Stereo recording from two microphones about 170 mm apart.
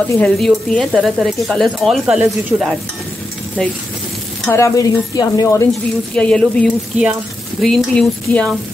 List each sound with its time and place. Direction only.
0.1 s speech: 5° left (ahead or behind)
4.5 s a woman's voice: 15° left (ahead or behind)
5.7 s speech: 5° left (ahead or behind)